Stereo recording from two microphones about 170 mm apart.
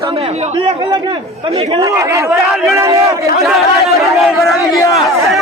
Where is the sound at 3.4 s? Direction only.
Centre (ahead or behind).